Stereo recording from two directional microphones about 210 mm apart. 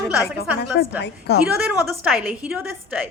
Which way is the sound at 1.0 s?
50° left (ahead or behind).